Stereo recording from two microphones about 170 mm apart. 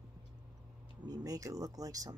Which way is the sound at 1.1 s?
20° right (ahead or behind).